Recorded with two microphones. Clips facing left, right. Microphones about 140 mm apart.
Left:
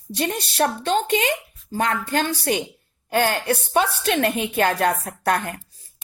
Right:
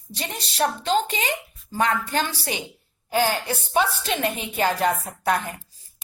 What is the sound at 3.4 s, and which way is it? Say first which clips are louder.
A woman's voice: left 2 dB; 60° left (ahead or behind).